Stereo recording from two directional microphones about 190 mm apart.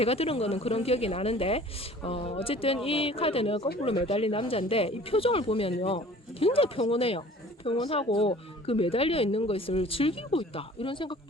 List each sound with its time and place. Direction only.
0.0 s speech: 30° left (ahead or behind)